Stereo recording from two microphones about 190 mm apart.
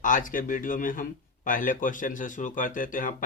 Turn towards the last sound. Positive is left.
turn(degrees=45)  # may be behind; listen again after turning